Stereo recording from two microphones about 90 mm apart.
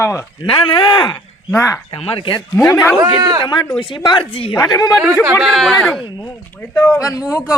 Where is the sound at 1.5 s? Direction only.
35° left (ahead or behind).